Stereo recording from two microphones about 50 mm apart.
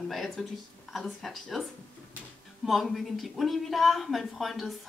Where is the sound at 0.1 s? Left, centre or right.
Centre.